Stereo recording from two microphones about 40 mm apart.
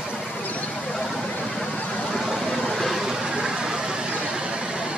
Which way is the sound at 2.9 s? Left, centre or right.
Centre.